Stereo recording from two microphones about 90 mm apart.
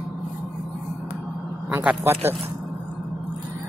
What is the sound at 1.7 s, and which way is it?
Speech, 20° right (ahead or behind).